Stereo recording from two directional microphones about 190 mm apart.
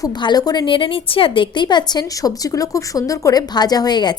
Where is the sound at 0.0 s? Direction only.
20° left (ahead or behind).